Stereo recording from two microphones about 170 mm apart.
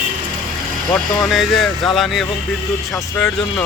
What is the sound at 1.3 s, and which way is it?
Speech, centre (ahead or behind).